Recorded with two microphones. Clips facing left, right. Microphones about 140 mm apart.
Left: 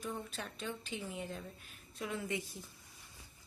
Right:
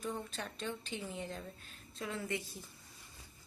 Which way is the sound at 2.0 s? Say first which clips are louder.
Even; 15° left (ahead or behind).